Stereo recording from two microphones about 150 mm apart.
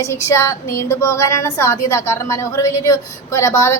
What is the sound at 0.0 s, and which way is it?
A woman's voice, 20° left (ahead or behind).